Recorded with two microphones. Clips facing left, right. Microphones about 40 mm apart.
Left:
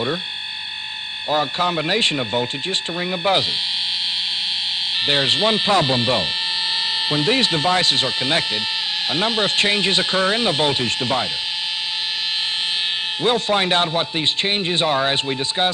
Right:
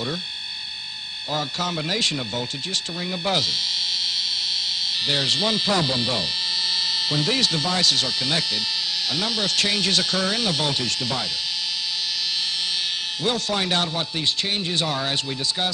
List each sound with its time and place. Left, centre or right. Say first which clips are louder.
1.3 s speech: left 7 dB; left
5.0 s speech: left 5 dB; left
13.2 s speech: left 6 dB; left